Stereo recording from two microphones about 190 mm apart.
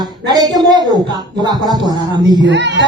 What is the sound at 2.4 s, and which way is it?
Speech, 70° right (ahead or behind).